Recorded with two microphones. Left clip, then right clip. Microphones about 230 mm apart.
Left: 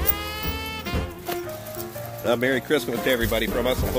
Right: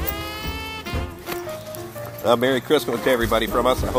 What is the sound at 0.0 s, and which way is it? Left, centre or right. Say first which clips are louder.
Music: even; centre.